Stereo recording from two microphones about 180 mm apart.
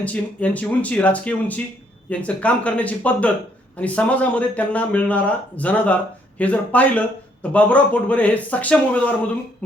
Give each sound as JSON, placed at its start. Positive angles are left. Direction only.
{"t": 0.0, "sound": "speech", "side_deg": 10}